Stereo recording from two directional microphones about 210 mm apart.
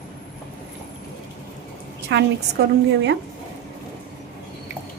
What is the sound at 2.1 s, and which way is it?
Speech, 55° right (ahead or behind).